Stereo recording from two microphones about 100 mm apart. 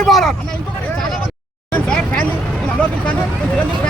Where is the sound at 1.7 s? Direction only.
10° left (ahead or behind).